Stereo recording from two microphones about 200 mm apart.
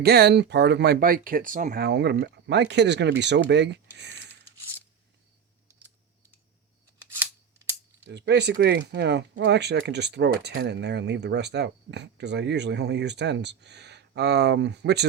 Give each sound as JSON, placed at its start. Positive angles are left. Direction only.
{"t": 0.0, "sound": "speech", "side_deg": -55}
{"t": 7.1, "sound": "scissors", "side_deg": -10}
{"t": 8.0, "sound": "speech", "side_deg": -60}